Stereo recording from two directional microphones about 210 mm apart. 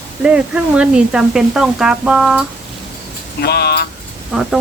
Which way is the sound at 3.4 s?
50° left (ahead or behind).